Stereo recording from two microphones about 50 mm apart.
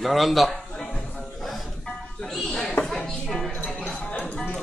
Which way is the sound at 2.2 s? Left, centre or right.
Centre.